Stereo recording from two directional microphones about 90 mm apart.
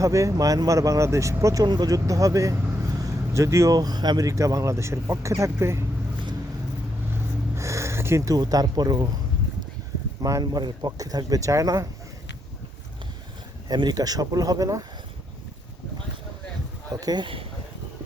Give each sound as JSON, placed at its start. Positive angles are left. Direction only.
{"t": 0.0, "sound": "speech", "side_deg": -35}
{"t": 1.6, "sound": "speech", "side_deg": -50}
{"t": 7.5, "sound": "a sound", "side_deg": -30}
{"t": 8.4, "sound": "speech", "side_deg": -45}
{"t": 10.4, "sound": "speech", "side_deg": -50}
{"t": 13.7, "sound": "speech", "side_deg": -50}
{"t": 16.9, "sound": "speech", "side_deg": -45}